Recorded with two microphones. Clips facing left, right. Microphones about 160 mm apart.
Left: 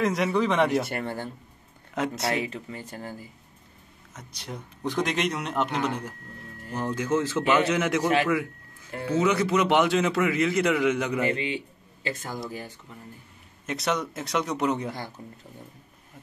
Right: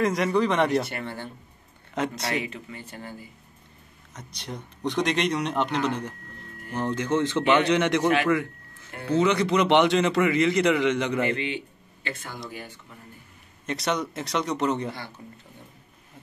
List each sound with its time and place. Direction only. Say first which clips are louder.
0.0 s a man's voice: right 1 dB; centre (ahead or behind)
0.8 s speech: left 3 dB; 45° left (ahead or behind)
2.0 s a man's voice: left 1 dB; centre (ahead or behind)
2.4 s speech: left 2 dB; 35° left (ahead or behind)
4.1 s a man's voice: right 1 dB; 5° left (ahead or behind)
8.3 s a sound: right 2 dB; 10° left (ahead or behind)
9.1 s a man's voice: right 1 dB; 5° left (ahead or behind)
11.2 s speech: even; 30° left (ahead or behind)
13.7 s a man's voice: right 1 dB; centre (ahead or behind)
15.2 s speech: left 1 dB; 40° left (ahead or behind)